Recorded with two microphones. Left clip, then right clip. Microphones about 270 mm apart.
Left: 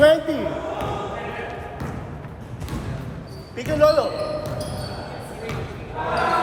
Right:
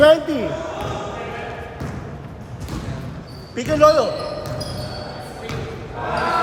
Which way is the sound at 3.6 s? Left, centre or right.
Right.